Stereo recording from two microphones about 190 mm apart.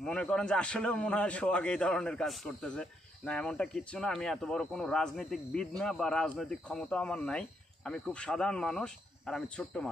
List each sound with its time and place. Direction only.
0.0 s a man's voice: 5° left (ahead or behind)